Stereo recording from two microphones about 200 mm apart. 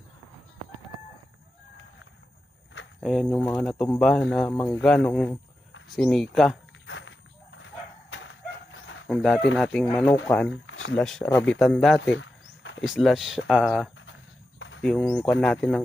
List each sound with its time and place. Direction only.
3.0 s speech: centre (ahead or behind)
4.5 s speech: 15° left (ahead or behind)
4.8 s speech: centre (ahead or behind)
6.8 s horse: 70° left (ahead or behind)
9.0 s speech: centre (ahead or behind)
10.7 s a sound: 75° left (ahead or behind)
10.9 s speech: 5° left (ahead or behind)
12.1 s cricket: 70° left (ahead or behind)
12.8 s speech: centre (ahead or behind)